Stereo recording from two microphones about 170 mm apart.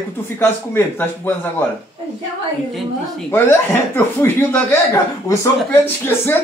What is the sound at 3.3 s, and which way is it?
Speech, 15° left (ahead or behind).